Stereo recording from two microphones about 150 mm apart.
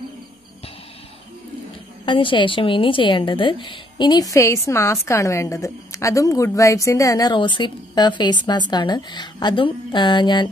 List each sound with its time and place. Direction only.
2.0 s a woman's voice: 35° left (ahead or behind)